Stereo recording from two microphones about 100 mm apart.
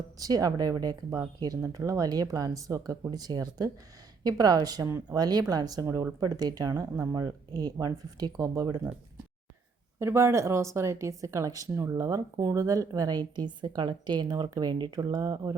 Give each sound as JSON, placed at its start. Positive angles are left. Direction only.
{"t": 0.2, "sound": "speech", "side_deg": -35}
{"t": 6.1, "sound": "speech", "side_deg": -40}
{"t": 10.0, "sound": "speech", "side_deg": -25}